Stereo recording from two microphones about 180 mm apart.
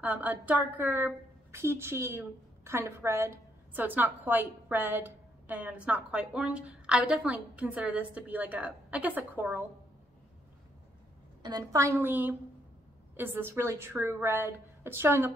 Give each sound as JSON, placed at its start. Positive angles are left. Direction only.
{"t": 0.0, "sound": "a woman's voice", "side_deg": -10}
{"t": 11.4, "sound": "a woman's voice", "side_deg": -20}